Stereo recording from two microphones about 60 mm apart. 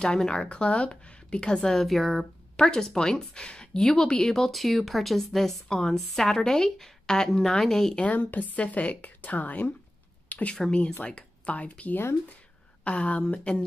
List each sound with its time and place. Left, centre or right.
0.0 s speech: centre
8.0 s a woman's voice: left